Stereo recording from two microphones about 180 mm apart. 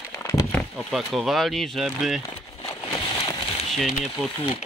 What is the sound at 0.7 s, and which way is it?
Speech, centre (ahead or behind).